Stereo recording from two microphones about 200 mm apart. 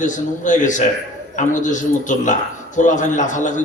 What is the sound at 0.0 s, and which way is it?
A man's voice, 40° left (ahead or behind).